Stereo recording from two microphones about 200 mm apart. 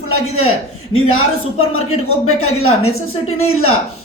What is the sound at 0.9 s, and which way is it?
A man's voice, 90° left.